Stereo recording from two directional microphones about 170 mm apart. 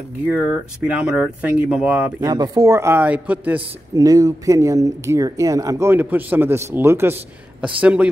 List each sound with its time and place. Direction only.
0.3 s speech: 10° right (ahead or behind)
2.2 s speech: 20° right (ahead or behind)
3.9 s speech: 20° right (ahead or behind)